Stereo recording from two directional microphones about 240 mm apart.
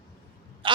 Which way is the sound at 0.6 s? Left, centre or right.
Right.